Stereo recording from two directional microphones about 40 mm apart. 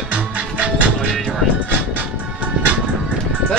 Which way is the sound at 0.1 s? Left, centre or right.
Right.